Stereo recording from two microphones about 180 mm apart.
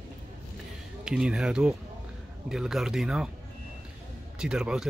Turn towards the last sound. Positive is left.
turn(degrees=-5)  # may be behind; listen again after turning